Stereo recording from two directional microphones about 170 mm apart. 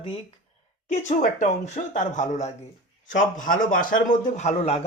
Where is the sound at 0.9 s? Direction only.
45° left (ahead or behind).